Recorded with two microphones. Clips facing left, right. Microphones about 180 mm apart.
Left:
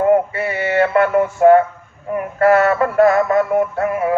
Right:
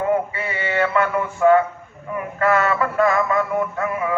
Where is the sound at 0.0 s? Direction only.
50° left (ahead or behind).